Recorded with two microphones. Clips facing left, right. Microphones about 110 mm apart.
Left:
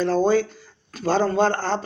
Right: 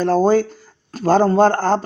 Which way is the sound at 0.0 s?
45° right (ahead or behind).